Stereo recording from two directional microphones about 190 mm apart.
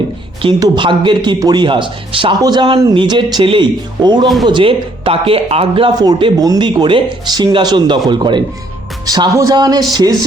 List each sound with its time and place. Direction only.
0.4 s speech: 25° right (ahead or behind)